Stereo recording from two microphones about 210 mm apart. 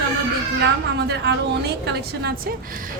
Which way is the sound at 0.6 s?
50° right (ahead or behind).